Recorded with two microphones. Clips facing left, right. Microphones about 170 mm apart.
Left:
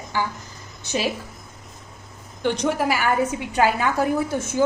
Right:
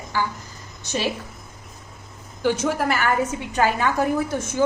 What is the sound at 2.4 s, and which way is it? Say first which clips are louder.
A woman's voice: even; 5° right (ahead or behind).